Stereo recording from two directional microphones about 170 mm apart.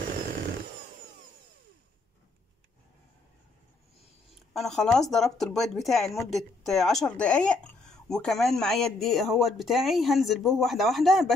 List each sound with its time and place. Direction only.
4.4 s speech: centre (ahead or behind)